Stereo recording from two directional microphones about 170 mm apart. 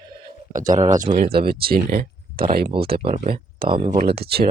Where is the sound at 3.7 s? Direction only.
30° right (ahead or behind).